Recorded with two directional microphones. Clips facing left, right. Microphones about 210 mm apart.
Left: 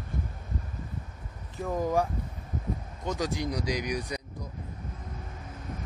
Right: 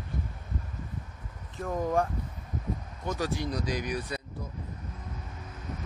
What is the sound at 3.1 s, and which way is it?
Speech, 15° left (ahead or behind).